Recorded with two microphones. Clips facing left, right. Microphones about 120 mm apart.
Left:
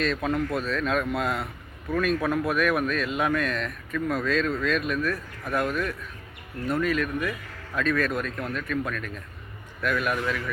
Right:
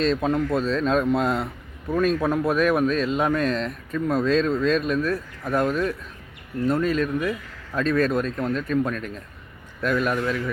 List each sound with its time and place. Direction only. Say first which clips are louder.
0.0 s speech: right 4 dB; 30° right (ahead or behind)